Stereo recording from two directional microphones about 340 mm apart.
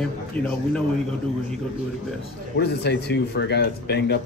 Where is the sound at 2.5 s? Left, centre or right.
Left.